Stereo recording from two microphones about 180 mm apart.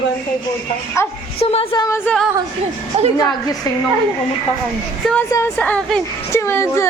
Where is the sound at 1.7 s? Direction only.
15° left (ahead or behind).